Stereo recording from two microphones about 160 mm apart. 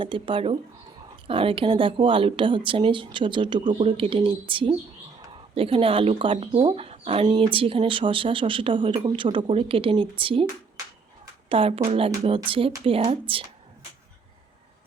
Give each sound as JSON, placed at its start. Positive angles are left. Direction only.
{"t": 0.0, "sound": "speech", "side_deg": -30}
{"t": 11.4, "sound": "speech", "side_deg": -35}